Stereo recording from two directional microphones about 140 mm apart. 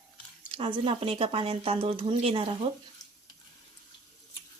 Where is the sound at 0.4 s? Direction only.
40° right (ahead or behind).